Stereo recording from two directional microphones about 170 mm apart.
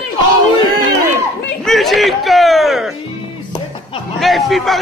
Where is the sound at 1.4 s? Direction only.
Centre (ahead or behind).